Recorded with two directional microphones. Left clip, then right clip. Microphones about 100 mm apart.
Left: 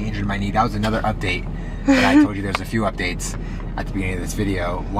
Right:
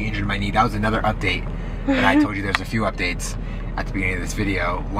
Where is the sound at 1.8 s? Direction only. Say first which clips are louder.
Left 2 dB; 20° left (ahead or behind).